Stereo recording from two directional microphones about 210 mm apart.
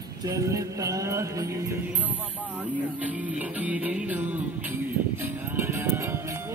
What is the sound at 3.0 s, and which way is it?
Music, 5° right (ahead or behind).